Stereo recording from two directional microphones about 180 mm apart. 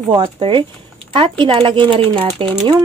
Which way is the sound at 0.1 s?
30° right (ahead or behind).